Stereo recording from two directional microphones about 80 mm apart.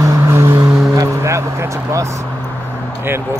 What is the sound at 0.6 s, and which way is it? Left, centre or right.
Vehicle, right.